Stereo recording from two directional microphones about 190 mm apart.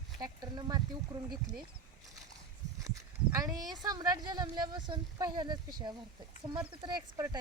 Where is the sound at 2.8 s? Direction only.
15° right (ahead or behind).